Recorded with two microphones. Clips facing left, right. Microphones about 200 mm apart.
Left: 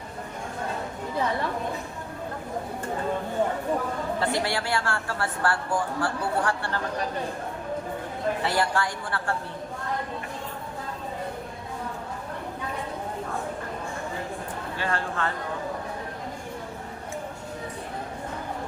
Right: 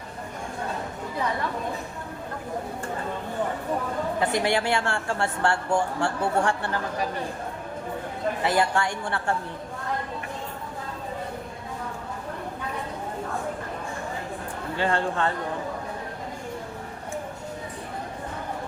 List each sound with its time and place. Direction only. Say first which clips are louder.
4.2 s speech: right 4 dB; 20° right (ahead or behind)
8.4 s speech: right 4 dB; 20° right (ahead or behind)
14.8 s speech: right 5 dB; 30° right (ahead or behind)